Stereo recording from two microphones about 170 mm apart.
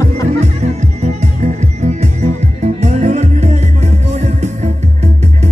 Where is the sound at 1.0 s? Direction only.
45° right (ahead or behind).